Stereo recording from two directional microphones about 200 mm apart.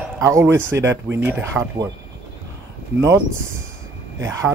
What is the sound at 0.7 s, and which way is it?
Speech, 15° right (ahead or behind).